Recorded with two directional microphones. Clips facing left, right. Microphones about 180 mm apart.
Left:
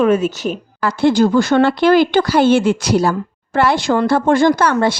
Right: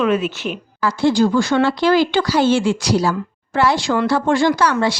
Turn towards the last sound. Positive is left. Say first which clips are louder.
# left 3 dB
turn(degrees=55)  # may be behind; listen again after turning